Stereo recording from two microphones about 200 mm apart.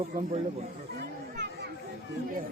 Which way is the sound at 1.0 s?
55° right (ahead or behind).